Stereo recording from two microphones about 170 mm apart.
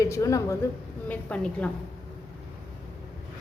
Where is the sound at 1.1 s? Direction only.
5° left (ahead or behind).